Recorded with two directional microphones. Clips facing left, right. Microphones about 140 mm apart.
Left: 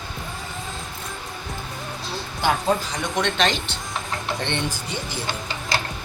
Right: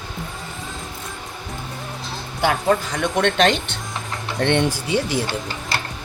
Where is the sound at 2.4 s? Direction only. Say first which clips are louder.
Right 3 dB; 65° right (ahead or behind).